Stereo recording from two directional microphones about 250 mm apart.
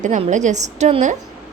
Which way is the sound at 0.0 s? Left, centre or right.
Right.